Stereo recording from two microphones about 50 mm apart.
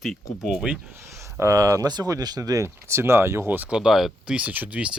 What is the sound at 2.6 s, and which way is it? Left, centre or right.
Speech, right.